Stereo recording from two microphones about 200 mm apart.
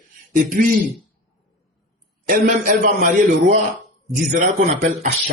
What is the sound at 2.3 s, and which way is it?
A man's voice, 45° right (ahead or behind).